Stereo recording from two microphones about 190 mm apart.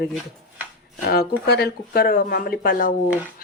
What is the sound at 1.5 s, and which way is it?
Speech, 55° left (ahead or behind).